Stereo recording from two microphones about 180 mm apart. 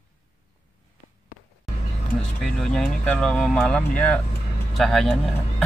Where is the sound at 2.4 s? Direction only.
Centre (ahead or behind).